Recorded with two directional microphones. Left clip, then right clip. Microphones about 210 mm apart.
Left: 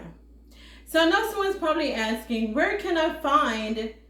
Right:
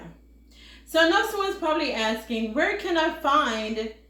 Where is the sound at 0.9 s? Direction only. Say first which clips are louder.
Right 1 dB; 10° left (ahead or behind).